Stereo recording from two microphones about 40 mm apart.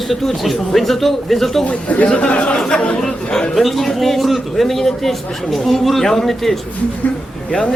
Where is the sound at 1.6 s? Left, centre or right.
Left; by 3.4 s centre.